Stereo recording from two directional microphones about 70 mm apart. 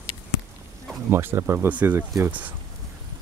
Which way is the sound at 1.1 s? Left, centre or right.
Right.